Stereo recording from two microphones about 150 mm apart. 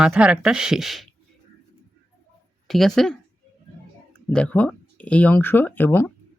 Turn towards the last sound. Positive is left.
turn(degrees=15)  # may be behind; listen again after turning